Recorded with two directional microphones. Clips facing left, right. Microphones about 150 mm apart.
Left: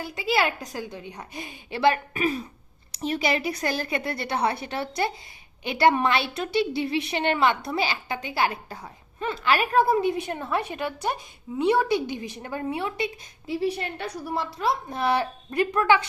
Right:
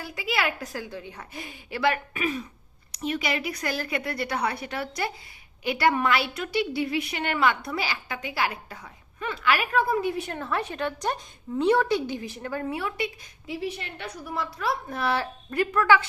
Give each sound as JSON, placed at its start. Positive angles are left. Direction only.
{"t": 0.0, "sound": "a woman's voice", "side_deg": 25}
{"t": 13.5, "sound": "a woman's voice", "side_deg": 35}